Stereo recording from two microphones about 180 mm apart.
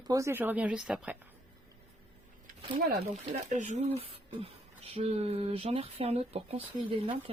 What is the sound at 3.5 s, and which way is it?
Speech, 40° right (ahead or behind).